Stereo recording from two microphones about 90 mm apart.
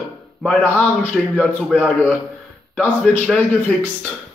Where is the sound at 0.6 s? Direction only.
25° left (ahead or behind).